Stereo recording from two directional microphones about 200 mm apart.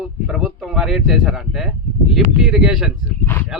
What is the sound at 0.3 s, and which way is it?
Speech, 5° right (ahead or behind).